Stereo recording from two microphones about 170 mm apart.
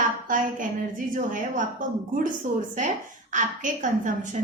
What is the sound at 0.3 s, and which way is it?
A woman's voice, 50° right (ahead or behind).